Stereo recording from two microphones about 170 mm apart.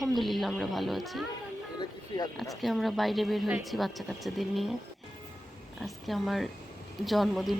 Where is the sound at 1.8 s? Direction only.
25° left (ahead or behind).